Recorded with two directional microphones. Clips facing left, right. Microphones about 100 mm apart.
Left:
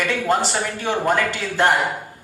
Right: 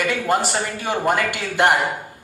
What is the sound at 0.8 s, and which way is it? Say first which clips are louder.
Speech: left 1 dB; 15° right (ahead or behind).